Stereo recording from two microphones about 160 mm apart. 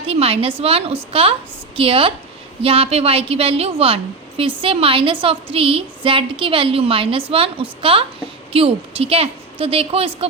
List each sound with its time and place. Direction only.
0.1 s a woman's voice: 40° right (ahead or behind)